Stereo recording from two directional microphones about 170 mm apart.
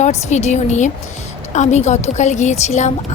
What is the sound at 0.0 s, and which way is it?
Speech, 40° left (ahead or behind).